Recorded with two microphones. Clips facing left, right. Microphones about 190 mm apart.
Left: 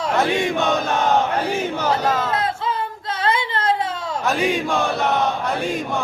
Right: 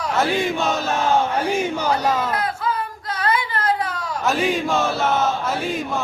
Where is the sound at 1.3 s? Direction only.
10° right (ahead or behind).